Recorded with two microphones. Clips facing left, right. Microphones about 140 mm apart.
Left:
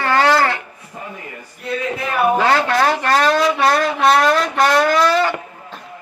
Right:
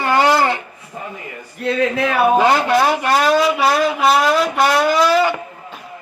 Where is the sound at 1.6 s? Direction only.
90° right.